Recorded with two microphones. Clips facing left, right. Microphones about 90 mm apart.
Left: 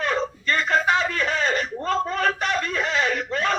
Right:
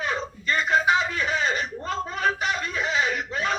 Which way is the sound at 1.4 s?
50° left (ahead or behind).